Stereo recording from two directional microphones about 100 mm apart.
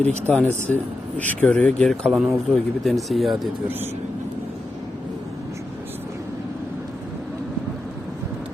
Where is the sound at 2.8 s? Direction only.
Centre (ahead or behind).